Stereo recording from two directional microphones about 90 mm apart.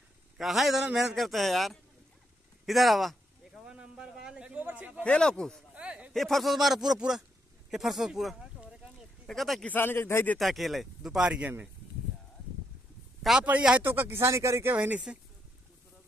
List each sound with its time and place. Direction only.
0.4 s a man's voice: centre (ahead or behind)
3.6 s a man's voice: 10° right (ahead or behind)
5.0 s speech: 10° left (ahead or behind)
5.8 s a sound: 15° right (ahead or behind)
6.1 s a man's voice: centre (ahead or behind)
9.7 s speech: 25° left (ahead or behind)
10.3 s a man's voice: centre (ahead or behind)
13.2 s a man's voice: 5° right (ahead or behind)
13.8 s speech: 25° right (ahead or behind)
14.7 s speech: 20° right (ahead or behind)